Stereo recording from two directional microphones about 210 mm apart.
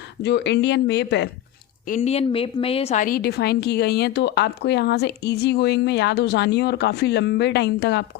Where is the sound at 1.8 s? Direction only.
35° left (ahead or behind).